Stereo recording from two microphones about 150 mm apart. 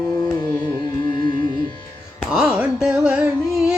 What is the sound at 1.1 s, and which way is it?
Carnatic music, 30° left (ahead or behind).